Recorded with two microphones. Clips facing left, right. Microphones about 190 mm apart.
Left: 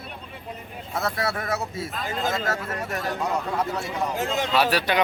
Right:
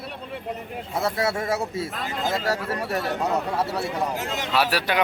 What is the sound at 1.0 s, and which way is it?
A man's voice, 25° right (ahead or behind).